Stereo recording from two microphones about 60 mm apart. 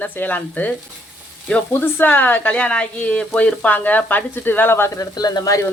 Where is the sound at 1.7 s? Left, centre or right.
Left.